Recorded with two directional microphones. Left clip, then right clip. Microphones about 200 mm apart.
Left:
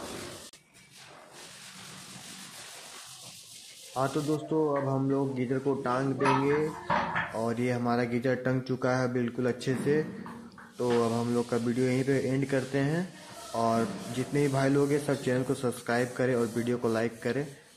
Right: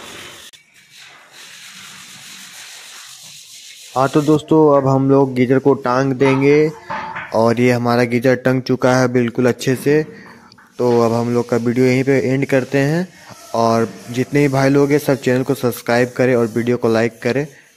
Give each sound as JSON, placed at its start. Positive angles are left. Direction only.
{"t": 3.9, "sound": "a man's voice", "side_deg": -50}